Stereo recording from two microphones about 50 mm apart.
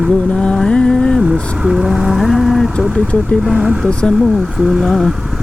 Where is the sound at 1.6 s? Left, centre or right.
Centre.